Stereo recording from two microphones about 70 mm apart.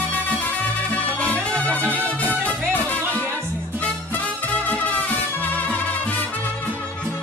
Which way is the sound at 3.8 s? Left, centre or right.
Left.